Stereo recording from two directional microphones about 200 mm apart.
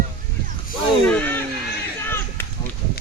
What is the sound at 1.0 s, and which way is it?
Speech, 10° left (ahead or behind).